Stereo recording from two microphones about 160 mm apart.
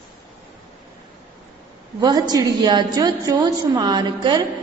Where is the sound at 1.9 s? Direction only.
25° right (ahead or behind).